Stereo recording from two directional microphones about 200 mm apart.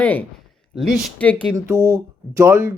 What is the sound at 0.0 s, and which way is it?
Speech, 10° left (ahead or behind).